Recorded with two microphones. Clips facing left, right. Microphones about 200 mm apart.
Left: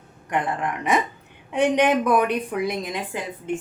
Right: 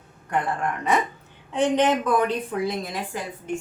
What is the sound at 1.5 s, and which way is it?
A woman's voice, 15° left (ahead or behind).